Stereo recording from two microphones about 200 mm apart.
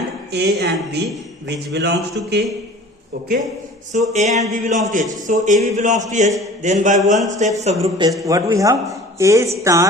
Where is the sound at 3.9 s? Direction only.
35° right (ahead or behind).